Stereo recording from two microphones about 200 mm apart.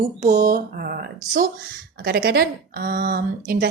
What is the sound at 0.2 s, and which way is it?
Speech, 40° right (ahead or behind).